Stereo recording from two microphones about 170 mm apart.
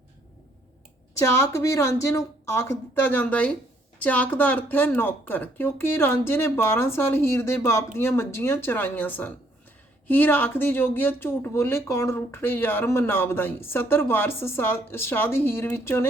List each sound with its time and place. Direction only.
1.2 s speech: 15° left (ahead or behind)